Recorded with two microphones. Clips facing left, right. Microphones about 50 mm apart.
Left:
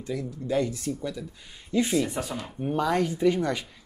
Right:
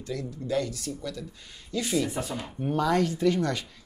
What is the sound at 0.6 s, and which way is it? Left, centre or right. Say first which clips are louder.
Speech: left 5 dB; left.